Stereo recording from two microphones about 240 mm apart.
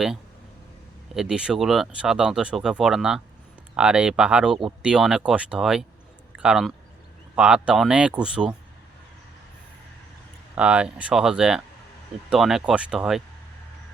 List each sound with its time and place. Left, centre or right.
1.1 s speech: centre
10.5 s speech: centre